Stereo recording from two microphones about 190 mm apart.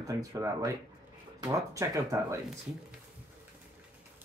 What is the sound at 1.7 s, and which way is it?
Speech, 15° right (ahead or behind).